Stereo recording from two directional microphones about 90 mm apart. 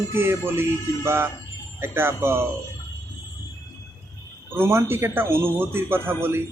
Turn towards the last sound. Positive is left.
turn(degrees=-25)  # may be behind; listen again after turning